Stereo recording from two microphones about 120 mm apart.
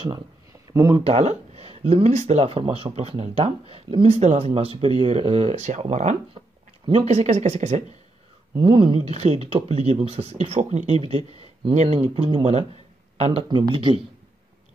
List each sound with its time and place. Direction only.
0.5 s a sound: 25° right (ahead or behind)
1.0 s speech: 70° right (ahead or behind)
8.5 s speech: 45° right (ahead or behind)
9.1 s speech: 60° right (ahead or behind)
13.4 s speech: 40° right (ahead or behind)